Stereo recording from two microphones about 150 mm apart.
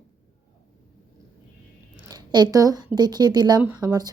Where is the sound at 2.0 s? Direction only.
25° right (ahead or behind).